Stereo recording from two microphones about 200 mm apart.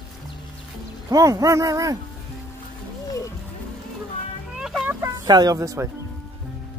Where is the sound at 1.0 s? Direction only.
15° right (ahead or behind).